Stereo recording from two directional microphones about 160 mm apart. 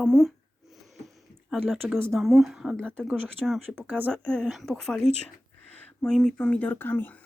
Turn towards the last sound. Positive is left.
turn(degrees=10)  # may be behind; listen again after turning